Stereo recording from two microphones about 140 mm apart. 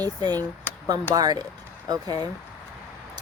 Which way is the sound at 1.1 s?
25° right (ahead or behind).